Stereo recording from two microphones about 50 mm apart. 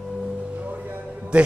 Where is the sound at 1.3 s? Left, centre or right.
Right.